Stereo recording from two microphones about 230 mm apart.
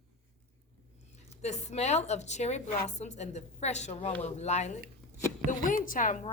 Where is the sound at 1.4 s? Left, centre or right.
Left.